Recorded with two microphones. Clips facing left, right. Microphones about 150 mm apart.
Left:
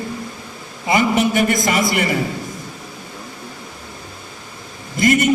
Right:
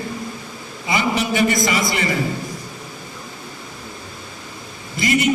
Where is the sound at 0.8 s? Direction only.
55° left (ahead or behind).